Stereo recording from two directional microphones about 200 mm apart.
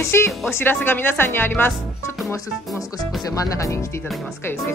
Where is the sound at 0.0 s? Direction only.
15° left (ahead or behind).